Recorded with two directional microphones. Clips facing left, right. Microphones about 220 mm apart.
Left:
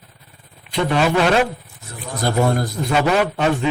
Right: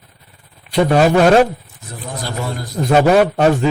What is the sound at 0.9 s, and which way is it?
Speech, 45° right (ahead or behind).